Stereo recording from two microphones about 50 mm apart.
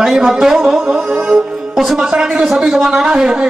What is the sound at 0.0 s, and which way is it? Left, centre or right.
A man's voice, centre.